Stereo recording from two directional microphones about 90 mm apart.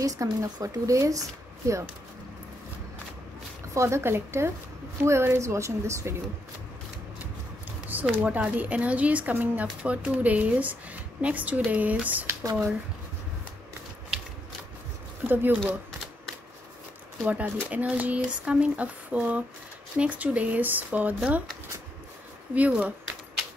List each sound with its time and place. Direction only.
0.0 s a woman's voice: 40° right (ahead or behind)
3.7 s a woman's voice: 30° right (ahead or behind)
7.9 s a woman's voice: 20° right (ahead or behind)
12.4 s a woman's voice: 35° right (ahead or behind)
15.2 s speech: 20° right (ahead or behind)
17.3 s a woman's voice: 15° right (ahead or behind)
22.5 s a woman's voice: 15° right (ahead or behind)